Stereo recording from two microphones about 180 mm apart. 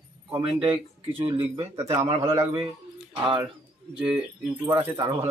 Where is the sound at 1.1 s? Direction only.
30° right (ahead or behind).